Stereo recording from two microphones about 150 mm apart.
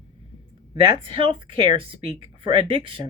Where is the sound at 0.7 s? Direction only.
35° right (ahead or behind).